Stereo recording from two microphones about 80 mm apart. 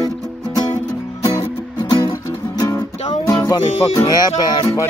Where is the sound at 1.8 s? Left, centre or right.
Left.